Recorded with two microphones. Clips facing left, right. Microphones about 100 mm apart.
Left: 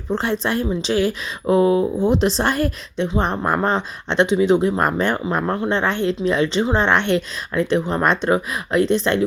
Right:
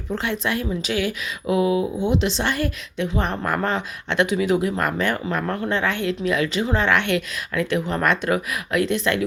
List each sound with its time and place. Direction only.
0.1 s speech: 35° left (ahead or behind)